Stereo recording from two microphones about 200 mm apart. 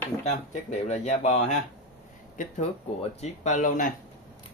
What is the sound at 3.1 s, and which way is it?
Speech, 35° left (ahead or behind).